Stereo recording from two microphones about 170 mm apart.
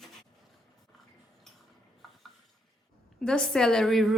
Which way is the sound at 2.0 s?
Centre (ahead or behind).